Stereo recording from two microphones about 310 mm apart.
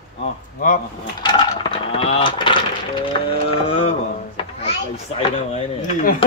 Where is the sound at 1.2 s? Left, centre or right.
Centre.